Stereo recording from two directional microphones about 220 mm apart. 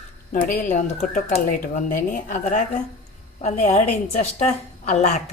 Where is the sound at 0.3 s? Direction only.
35° left (ahead or behind).